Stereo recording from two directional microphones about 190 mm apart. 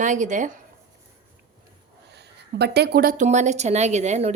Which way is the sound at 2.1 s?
60° right (ahead or behind).